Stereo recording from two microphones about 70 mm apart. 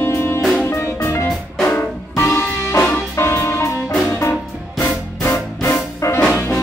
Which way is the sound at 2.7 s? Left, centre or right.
Left.